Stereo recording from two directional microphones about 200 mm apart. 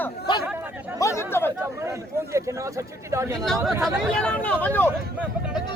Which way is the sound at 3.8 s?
5° left (ahead or behind).